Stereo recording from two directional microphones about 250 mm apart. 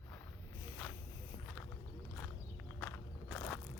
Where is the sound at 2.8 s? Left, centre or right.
Centre.